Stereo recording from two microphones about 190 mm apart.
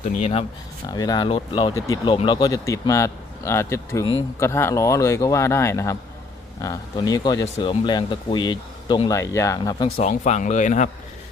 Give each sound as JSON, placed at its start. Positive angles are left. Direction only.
{"t": 0.2, "sound": "speech", "side_deg": 30}
{"t": 0.9, "sound": "speech", "side_deg": 20}
{"t": 10.0, "sound": "speech", "side_deg": 40}